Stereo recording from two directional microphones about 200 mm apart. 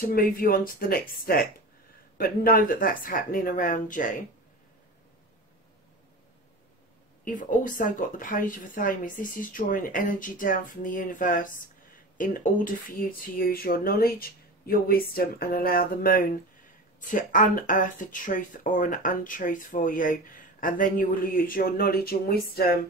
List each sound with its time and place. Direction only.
0.0 s speech: 45° left (ahead or behind)
7.2 s speech: 40° left (ahead or behind)